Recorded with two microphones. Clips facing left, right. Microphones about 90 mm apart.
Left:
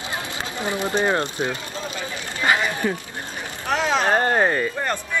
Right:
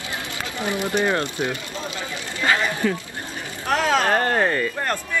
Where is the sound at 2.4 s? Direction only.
20° left (ahead or behind).